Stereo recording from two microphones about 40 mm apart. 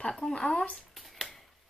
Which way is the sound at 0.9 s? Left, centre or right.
Centre.